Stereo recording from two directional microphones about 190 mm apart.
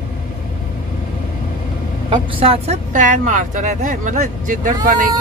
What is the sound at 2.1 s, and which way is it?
Speech, 30° right (ahead or behind).